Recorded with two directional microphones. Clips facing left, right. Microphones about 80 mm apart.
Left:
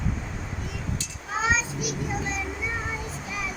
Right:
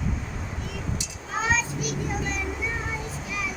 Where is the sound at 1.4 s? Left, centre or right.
Centre.